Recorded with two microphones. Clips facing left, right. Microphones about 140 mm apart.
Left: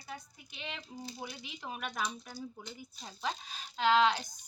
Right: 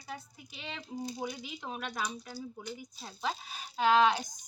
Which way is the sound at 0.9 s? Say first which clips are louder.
Right 6 dB; 15° right (ahead or behind).